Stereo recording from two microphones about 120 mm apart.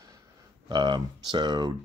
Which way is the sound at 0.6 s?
40° right (ahead or behind).